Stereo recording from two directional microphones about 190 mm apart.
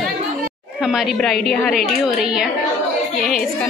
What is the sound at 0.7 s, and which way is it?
A woman's voice, centre (ahead or behind).